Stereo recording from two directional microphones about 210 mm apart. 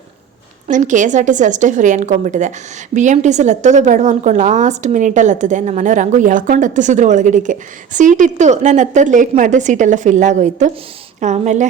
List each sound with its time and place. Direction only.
0.7 s a woman's voice: 35° right (ahead or behind)